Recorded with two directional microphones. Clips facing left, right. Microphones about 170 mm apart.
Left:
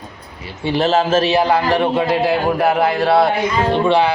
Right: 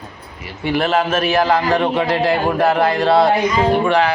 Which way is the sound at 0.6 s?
25° left (ahead or behind).